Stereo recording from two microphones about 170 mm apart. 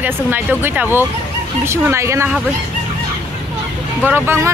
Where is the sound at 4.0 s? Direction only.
15° right (ahead or behind).